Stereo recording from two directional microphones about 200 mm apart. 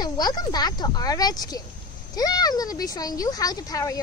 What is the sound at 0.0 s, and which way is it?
Speech, 20° left (ahead or behind).